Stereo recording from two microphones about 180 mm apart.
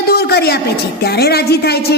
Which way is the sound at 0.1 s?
60° left (ahead or behind).